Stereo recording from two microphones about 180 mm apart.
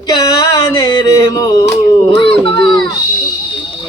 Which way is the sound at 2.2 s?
30° left (ahead or behind).